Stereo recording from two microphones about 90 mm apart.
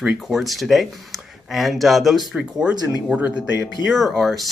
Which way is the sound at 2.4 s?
10° right (ahead or behind).